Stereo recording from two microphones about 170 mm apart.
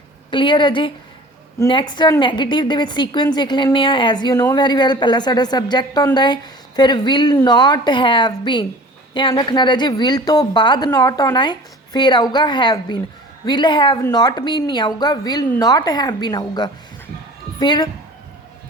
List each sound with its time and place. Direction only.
0.3 s a woman's voice: 30° left (ahead or behind)